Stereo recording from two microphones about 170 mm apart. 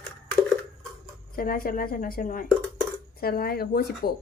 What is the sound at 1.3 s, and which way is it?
Speech, 55° left (ahead or behind).